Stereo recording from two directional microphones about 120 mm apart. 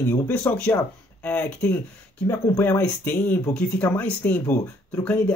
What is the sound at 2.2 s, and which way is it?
Speech, 25° left (ahead or behind).